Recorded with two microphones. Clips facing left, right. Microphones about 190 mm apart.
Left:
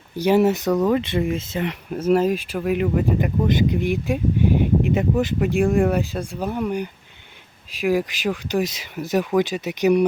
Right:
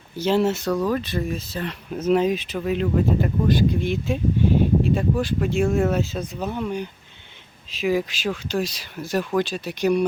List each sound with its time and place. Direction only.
0.2 s speech: 15° left (ahead or behind)
1.9 s speech: 5° left (ahead or behind)